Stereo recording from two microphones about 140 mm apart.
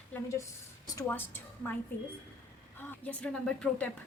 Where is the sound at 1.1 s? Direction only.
15° left (ahead or behind).